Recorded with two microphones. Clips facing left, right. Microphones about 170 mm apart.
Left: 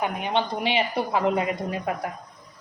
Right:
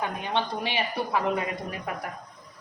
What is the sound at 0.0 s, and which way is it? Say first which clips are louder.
Speech: left 3 dB; 15° left (ahead or behind).